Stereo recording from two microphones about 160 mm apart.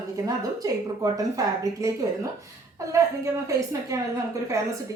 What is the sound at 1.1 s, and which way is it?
Speech, 20° right (ahead or behind).